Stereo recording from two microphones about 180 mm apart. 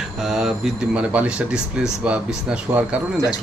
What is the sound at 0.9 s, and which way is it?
Speech, 5° right (ahead or behind).